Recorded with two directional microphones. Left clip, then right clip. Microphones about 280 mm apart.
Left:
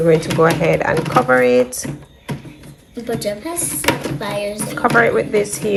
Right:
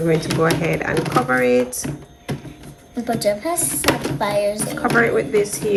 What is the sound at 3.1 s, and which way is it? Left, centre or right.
Speech, right.